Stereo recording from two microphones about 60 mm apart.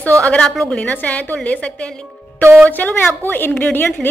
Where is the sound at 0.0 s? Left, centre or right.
Left.